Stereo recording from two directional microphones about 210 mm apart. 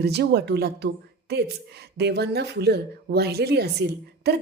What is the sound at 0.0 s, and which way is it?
Speech, 50° right (ahead or behind).